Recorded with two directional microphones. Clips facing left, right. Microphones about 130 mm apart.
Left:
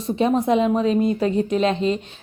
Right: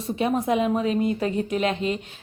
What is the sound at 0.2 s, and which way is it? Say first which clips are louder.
Speech: left 4 dB; 25° left (ahead or behind).